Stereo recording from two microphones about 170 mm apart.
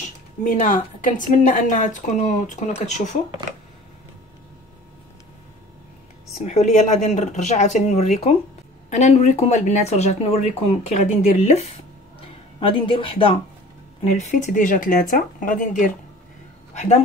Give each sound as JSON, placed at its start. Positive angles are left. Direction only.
{"t": 0.4, "sound": "a woman's voice", "side_deg": 50}
{"t": 6.3, "sound": "a woman's voice", "side_deg": 40}
{"t": 14.1, "sound": "a woman's voice", "side_deg": 45}